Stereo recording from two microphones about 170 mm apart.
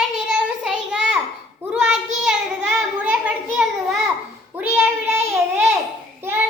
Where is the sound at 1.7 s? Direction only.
5° right (ahead or behind).